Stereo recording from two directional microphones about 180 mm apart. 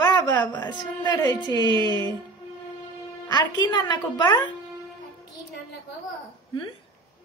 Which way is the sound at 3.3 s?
25° left (ahead or behind).